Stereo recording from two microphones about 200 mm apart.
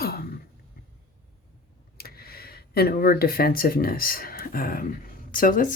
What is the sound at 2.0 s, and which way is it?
Speech, 50° left (ahead or behind).